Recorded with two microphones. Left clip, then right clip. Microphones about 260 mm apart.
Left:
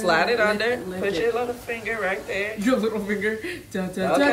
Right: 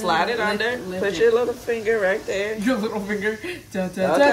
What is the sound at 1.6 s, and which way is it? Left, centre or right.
Speech, right.